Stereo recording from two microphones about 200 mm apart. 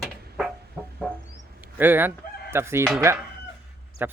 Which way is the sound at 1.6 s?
10° right (ahead or behind).